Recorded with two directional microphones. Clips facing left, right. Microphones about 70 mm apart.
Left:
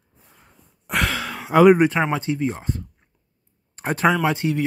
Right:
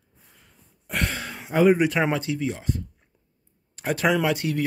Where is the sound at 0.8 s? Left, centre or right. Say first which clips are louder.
Left 5 dB; left.